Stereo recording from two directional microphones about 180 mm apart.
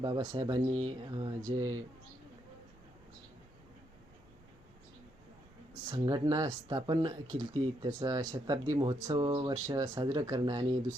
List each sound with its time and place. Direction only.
0.0 s speech: 20° right (ahead or behind)
5.9 s speech: 25° right (ahead or behind)